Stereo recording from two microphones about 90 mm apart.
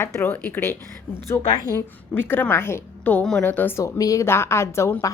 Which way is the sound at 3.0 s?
15° left (ahead or behind).